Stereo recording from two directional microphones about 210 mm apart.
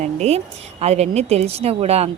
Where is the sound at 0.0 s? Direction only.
30° right (ahead or behind).